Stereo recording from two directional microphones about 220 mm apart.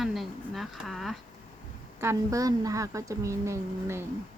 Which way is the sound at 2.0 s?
15° right (ahead or behind).